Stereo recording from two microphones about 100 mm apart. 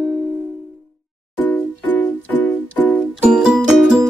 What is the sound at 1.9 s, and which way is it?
Music, 15° left (ahead or behind).